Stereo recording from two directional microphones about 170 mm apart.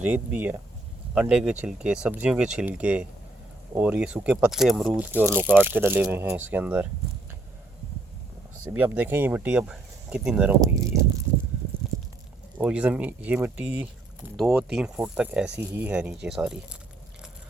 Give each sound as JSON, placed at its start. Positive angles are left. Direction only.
{"t": 0.0, "sound": "speech", "side_deg": -10}
{"t": 8.7, "sound": "speech", "side_deg": -10}
{"t": 10.6, "sound": "speech", "side_deg": -15}
{"t": 12.5, "sound": "speech", "side_deg": -10}